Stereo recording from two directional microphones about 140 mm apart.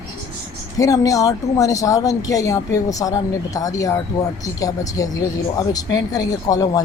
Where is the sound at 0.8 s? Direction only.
25° left (ahead or behind).